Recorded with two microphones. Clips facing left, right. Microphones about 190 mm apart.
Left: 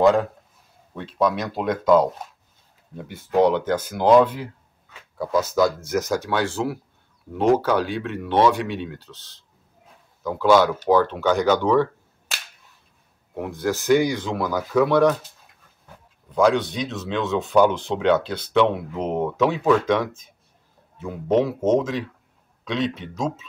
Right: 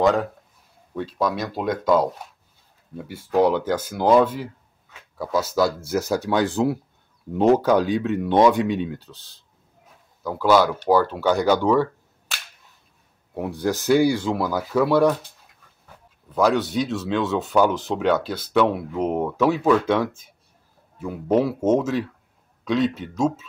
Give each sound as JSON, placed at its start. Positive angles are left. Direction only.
{"t": 0.9, "sound": "speech", "side_deg": -5}
{"t": 13.6, "sound": "speech", "side_deg": -15}
{"t": 16.3, "sound": "speech", "side_deg": -5}